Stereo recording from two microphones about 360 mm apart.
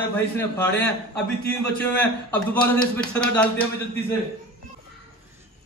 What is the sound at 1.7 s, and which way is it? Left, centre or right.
A man's voice, centre.